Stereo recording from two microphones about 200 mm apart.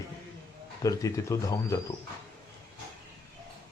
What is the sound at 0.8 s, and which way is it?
Speech, 15° left (ahead or behind).